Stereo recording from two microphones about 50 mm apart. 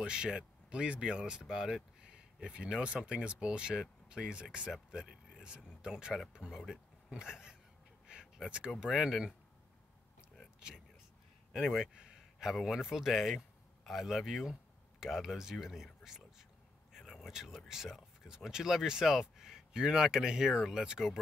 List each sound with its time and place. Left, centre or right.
0.0 s speech: centre
4.9 s a sound: centre
5.8 s speech: centre
6.4 s speech: right
7.1 s speech: centre
11.9 s a sound: centre
12.5 s speech: centre
16.9 s vehicle: centre
17.6 s speech: centre